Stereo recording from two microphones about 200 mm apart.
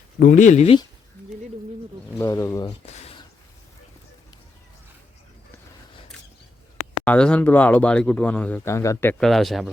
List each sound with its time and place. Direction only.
0.2 s speech: 40° left (ahead or behind)
2.1 s speech: 15° left (ahead or behind)
7.0 s speech: 5° left (ahead or behind)